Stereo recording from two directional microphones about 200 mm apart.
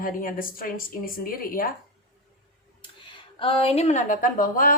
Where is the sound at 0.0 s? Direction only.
45° left (ahead or behind).